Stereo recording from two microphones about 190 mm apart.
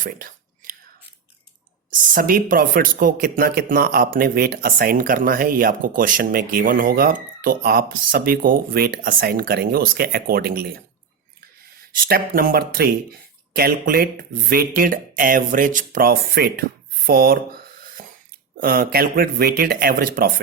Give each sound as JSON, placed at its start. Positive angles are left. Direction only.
{"t": 0.0, "sound": "whispering", "side_deg": -50}
{"t": 1.9, "sound": "speech", "side_deg": -45}
{"t": 12.0, "sound": "speech", "side_deg": -50}
{"t": 17.1, "sound": "a sound", "side_deg": -50}
{"t": 18.6, "sound": "speech", "side_deg": -50}